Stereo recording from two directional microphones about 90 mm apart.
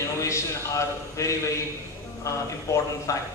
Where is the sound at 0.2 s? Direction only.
35° left (ahead or behind).